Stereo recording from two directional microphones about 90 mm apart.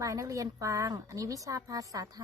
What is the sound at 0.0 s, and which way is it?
A woman's voice, 40° right (ahead or behind).